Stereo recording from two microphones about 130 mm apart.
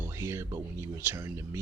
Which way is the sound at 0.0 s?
20° right (ahead or behind).